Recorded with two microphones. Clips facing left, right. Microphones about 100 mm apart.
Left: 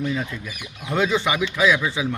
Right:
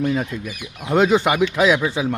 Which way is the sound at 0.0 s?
60° right (ahead or behind).